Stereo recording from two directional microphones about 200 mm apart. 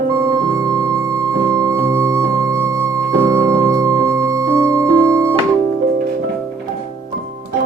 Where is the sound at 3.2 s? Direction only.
15° right (ahead or behind).